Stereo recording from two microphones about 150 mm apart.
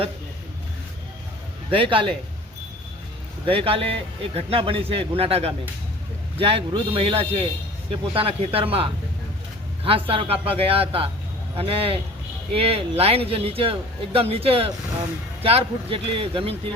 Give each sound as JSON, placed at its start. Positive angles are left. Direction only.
{"t": 1.7, "sound": "speech", "side_deg": -35}
{"t": 3.4, "sound": "speech", "side_deg": -35}